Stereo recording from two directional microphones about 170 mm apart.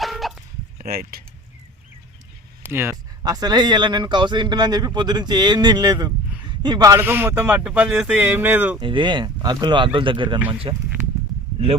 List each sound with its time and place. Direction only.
0.0 s chicken: centre (ahead or behind)
0.8 s speech: 60° right (ahead or behind)
2.6 s speech: 15° right (ahead or behind)
8.8 s speech: 30° right (ahead or behind)